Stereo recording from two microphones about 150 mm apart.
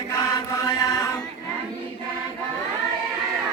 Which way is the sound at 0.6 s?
25° left (ahead or behind).